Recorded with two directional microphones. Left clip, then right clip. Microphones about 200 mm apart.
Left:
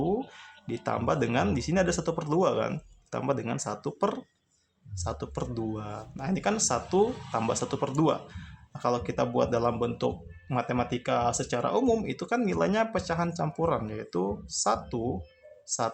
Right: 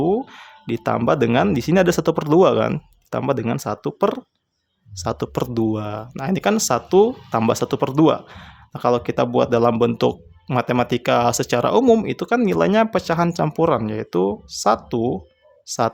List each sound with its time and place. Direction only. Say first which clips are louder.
0.1 s speech: right 9 dB; 40° right (ahead or behind)